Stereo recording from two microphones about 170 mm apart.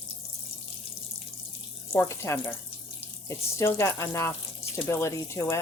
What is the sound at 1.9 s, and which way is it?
Speech, 10° left (ahead or behind).